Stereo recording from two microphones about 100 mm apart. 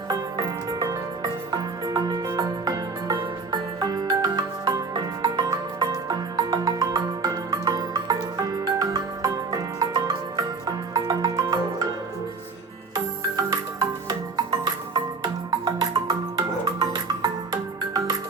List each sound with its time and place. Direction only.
0.1 s music: 40° right (ahead or behind)
12.9 s music: 40° right (ahead or behind)